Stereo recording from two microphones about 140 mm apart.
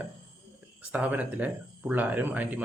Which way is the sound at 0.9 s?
10° right (ahead or behind).